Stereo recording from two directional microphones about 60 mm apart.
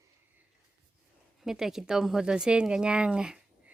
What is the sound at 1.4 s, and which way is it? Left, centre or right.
Speech, centre.